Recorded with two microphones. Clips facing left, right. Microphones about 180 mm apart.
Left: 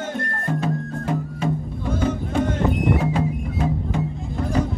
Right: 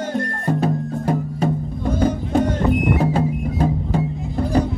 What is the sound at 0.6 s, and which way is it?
Music, 40° right (ahead or behind).